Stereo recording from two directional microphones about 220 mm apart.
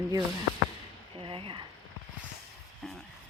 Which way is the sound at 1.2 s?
25° right (ahead or behind).